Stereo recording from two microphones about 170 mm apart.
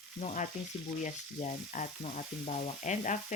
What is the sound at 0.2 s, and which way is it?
Frying, 45° left (ahead or behind).